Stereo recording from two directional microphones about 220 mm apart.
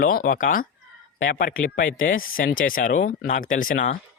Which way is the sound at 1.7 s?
40° left (ahead or behind).